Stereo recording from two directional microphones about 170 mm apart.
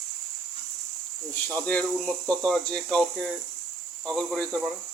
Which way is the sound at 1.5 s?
10° left (ahead or behind).